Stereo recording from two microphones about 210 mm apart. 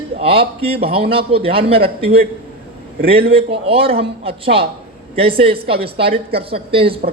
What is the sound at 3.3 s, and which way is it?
A man's voice, 25° right (ahead or behind).